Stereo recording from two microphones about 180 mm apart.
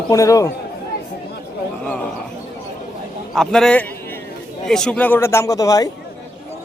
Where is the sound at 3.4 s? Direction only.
5° left (ahead or behind); by 5.9 s 20° left (ahead or behind).